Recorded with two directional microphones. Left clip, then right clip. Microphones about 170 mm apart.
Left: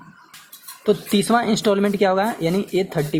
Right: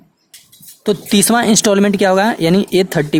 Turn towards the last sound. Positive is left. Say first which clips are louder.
# right 7 dB
turn(degrees=-50)  # may be behind; listen again after turning